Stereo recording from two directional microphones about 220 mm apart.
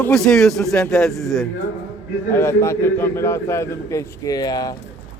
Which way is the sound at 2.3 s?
10° left (ahead or behind).